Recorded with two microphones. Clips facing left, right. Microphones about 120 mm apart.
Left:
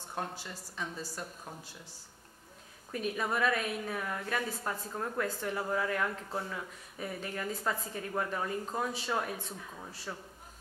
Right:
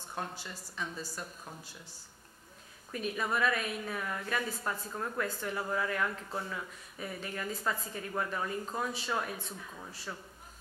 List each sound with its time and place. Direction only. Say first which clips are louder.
0.1 s a woman's voice: left 1 dB; 30° left (ahead or behind)
2.9 s a woman's voice: left 1 dB; 45° left (ahead or behind); by 10.1 s 30° left (ahead or behind)